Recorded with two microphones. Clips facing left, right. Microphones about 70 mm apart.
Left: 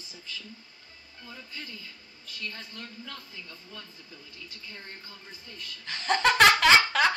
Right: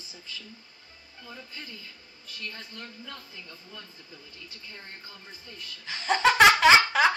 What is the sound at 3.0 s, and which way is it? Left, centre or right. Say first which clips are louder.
Speech: even; right.